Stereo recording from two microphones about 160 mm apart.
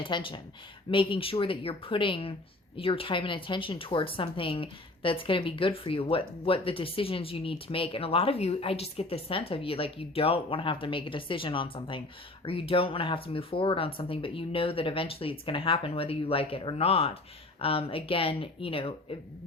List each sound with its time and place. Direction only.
0.0 s a woman's voice: 30° left (ahead or behind)